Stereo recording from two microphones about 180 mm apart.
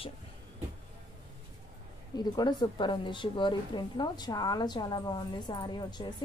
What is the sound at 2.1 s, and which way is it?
Speech, 25° left (ahead or behind).